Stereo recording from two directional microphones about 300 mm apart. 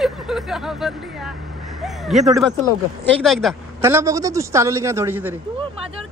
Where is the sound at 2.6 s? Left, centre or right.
Centre.